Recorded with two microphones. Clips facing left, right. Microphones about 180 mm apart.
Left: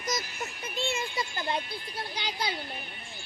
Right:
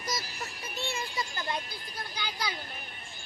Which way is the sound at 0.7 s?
25° left (ahead or behind).